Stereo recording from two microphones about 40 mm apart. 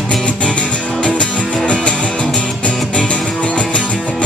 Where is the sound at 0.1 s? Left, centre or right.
Left.